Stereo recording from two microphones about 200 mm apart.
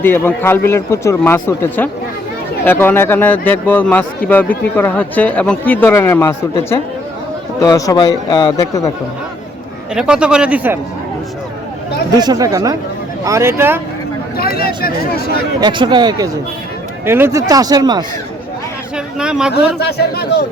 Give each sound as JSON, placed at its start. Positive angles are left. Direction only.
{"t": 0.0, "sound": "a man's voice", "side_deg": 10}
{"t": 9.9, "sound": "speech", "side_deg": -5}
{"t": 12.1, "sound": "speech", "side_deg": -20}
{"t": 14.3, "sound": "speech", "side_deg": 50}
{"t": 15.6, "sound": "speech", "side_deg": -25}
{"t": 18.9, "sound": "speech", "side_deg": -5}
{"t": 19.5, "sound": "speech", "side_deg": 55}